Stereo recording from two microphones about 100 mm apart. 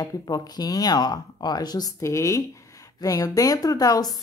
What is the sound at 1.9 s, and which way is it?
Speech, 30° left (ahead or behind).